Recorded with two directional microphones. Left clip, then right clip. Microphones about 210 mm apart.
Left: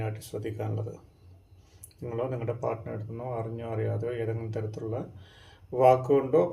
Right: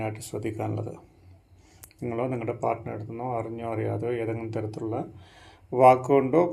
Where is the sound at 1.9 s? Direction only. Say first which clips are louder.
Right 3 dB; 40° right (ahead or behind).